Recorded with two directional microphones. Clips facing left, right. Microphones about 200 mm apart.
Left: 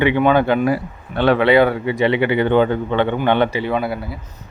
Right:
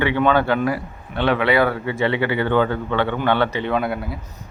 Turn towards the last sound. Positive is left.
turn(degrees=0)  # may be behind; listen again after turning